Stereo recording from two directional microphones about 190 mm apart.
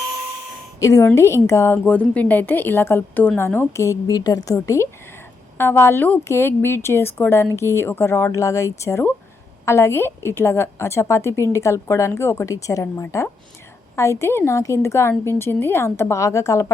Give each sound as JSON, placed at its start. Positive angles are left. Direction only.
{"t": 0.8, "sound": "a woman's voice", "side_deg": 15}